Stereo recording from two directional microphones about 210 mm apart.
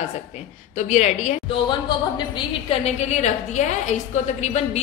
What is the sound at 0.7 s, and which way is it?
A woman's voice, 35° left (ahead or behind).